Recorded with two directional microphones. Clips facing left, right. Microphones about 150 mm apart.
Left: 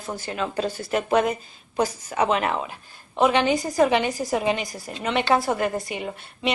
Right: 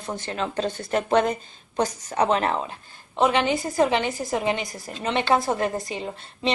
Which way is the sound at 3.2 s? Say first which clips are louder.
Left 1 dB; 15° left (ahead or behind).